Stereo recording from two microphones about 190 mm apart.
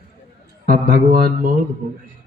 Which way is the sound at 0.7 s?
50° right (ahead or behind).